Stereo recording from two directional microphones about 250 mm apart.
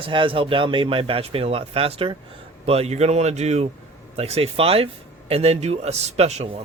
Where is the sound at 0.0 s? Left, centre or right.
Right.